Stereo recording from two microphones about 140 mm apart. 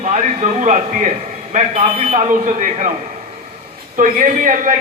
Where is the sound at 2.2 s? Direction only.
65° right (ahead or behind).